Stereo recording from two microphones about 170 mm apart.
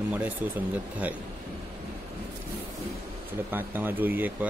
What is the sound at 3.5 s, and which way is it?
A man's voice, 10° right (ahead or behind).